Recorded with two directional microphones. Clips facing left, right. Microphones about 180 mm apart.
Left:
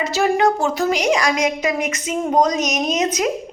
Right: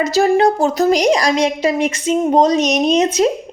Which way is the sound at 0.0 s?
35° right (ahead or behind).